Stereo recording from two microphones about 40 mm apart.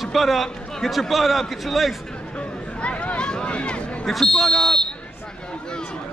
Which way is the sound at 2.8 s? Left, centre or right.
Left.